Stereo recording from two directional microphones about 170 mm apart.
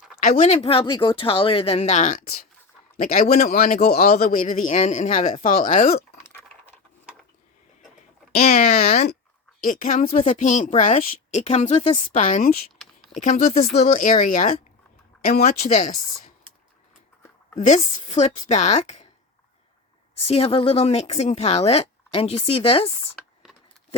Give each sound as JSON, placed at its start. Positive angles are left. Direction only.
{"t": 0.2, "sound": "speech", "side_deg": 45}
{"t": 3.0, "sound": "a woman's voice", "side_deg": 55}
{"t": 8.4, "sound": "a woman's voice", "side_deg": 45}
{"t": 10.0, "sound": "a woman's voice", "side_deg": 35}
{"t": 13.7, "sound": "a woman's voice", "side_deg": 50}
{"t": 15.4, "sound": "a woman's voice", "side_deg": 45}
{"t": 17.6, "sound": "a woman's voice", "side_deg": 40}
{"t": 20.2, "sound": "speech", "side_deg": 35}
{"t": 23.1, "sound": "a sound", "side_deg": 0}